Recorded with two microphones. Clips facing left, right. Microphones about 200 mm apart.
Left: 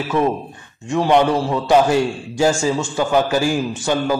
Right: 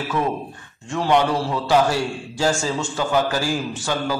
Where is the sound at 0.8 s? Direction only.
15° left (ahead or behind).